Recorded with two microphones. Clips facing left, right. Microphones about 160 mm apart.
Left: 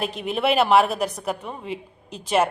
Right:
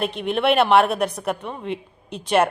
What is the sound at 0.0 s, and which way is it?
A woman's voice, centre (ahead or behind).